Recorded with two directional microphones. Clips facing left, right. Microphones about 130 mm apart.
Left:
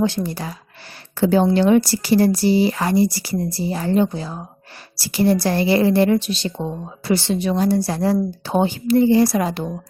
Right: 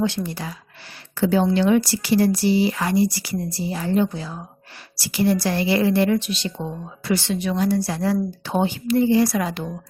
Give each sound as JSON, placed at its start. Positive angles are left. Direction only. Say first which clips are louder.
{"t": 0.0, "sound": "a woman's voice", "louder": "left 3 dB", "side_deg": 40}